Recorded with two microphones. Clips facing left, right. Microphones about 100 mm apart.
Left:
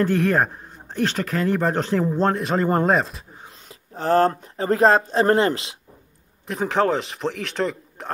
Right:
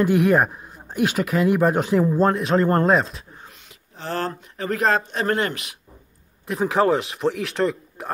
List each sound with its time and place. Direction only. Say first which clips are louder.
0.0 s speech: right 2 dB; 15° right (ahead or behind)
3.6 s speech: left 9 dB; 40° left (ahead or behind)
6.4 s speech: right 1 dB; centre (ahead or behind)